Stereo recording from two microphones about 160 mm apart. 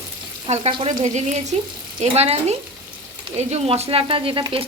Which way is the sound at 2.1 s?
40° right (ahead or behind).